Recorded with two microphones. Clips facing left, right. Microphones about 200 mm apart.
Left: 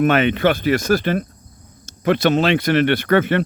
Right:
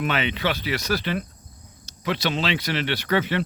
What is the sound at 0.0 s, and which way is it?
Speech, 50° left (ahead or behind).